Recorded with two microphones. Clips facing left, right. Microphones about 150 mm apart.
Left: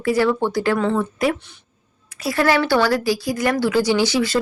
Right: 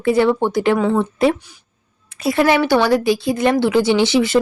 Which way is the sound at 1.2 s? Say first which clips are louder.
Right 5 dB; 25° right (ahead or behind).